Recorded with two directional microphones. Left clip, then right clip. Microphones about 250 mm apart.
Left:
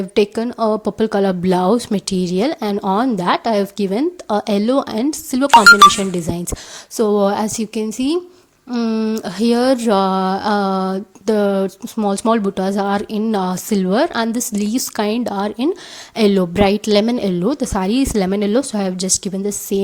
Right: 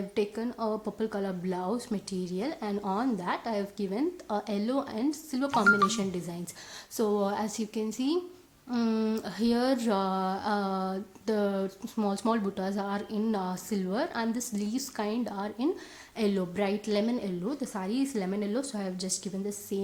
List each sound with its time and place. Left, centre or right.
0.1 s a woman's voice: left